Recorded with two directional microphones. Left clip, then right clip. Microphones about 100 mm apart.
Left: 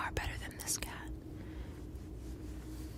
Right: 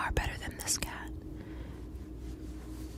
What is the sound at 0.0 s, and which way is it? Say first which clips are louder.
Whispering: right 5 dB; 25° right (ahead or behind).